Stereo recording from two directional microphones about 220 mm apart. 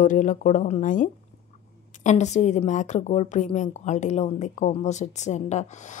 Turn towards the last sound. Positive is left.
turn(degrees=35)  # may be behind; listen again after turning